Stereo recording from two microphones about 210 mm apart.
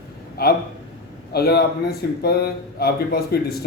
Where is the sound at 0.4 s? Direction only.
45° left (ahead or behind).